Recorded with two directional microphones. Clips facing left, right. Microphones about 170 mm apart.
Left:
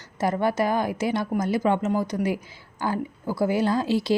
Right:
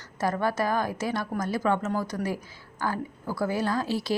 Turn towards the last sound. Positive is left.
turn(degrees=25)  # may be behind; listen again after turning